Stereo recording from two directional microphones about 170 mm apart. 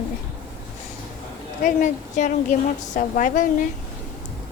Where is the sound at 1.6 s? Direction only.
45° left (ahead or behind).